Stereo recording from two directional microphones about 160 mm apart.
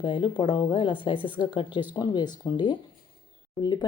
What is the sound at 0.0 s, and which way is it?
A woman's voice, 30° left (ahead or behind).